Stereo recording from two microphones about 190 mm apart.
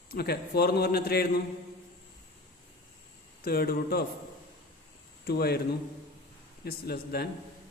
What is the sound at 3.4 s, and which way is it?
Speech, 55° left (ahead or behind).